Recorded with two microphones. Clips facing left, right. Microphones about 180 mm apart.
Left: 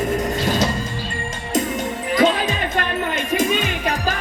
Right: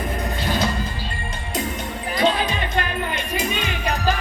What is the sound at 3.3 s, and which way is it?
Music, 50° left (ahead or behind).